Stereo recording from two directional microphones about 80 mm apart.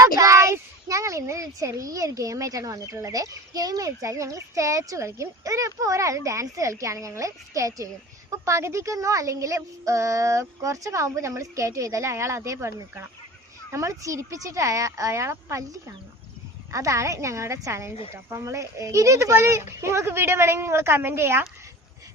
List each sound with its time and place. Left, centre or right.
0.0 s a child's voice: right